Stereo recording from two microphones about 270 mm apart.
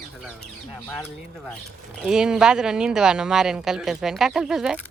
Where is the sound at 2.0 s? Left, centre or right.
Centre.